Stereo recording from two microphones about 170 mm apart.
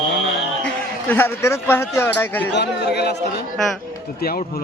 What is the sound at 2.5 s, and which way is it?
Speech, 75° left (ahead or behind).